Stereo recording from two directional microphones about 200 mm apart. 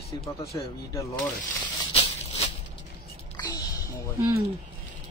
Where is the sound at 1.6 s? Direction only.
30° left (ahead or behind).